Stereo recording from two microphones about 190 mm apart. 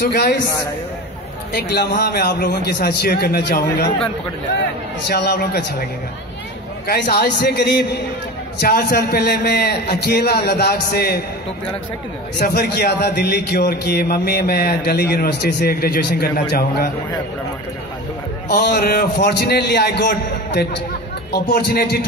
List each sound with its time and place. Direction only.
0.1 s a man's voice: 60° left (ahead or behind)
1.5 s a man's voice: 60° left (ahead or behind)
5.0 s a man's voice: 60° left (ahead or behind)
6.9 s a man's voice: 55° left (ahead or behind)
12.4 s a man's voice: 55° left (ahead or behind)
18.5 s a man's voice: 60° left (ahead or behind)